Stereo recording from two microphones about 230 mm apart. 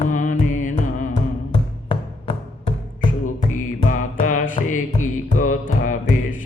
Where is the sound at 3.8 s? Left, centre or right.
Left.